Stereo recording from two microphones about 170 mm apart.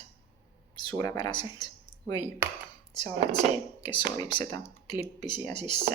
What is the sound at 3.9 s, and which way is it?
Speech, 25° left (ahead or behind).